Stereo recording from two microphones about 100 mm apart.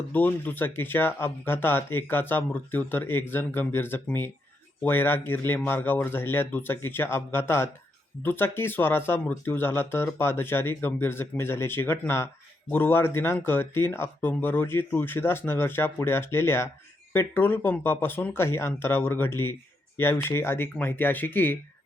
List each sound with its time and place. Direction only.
0.1 s speech: 15° left (ahead or behind)